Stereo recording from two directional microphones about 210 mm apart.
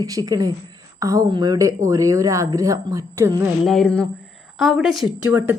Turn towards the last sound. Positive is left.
turn(degrees=-10)  # may be behind; listen again after turning